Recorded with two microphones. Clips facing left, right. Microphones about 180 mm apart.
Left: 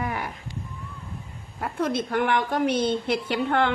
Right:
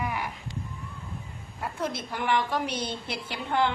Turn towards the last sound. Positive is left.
turn(degrees=60)  # may be behind; listen again after turning